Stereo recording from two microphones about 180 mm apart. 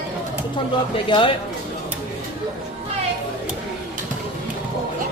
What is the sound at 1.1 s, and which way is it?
Speech, 30° left (ahead or behind).